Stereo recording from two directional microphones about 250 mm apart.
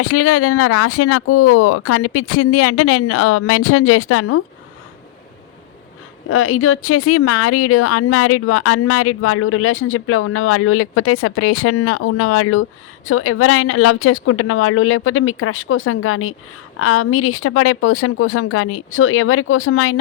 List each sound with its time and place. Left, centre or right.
0.0 s speech: left
6.2 s speech: left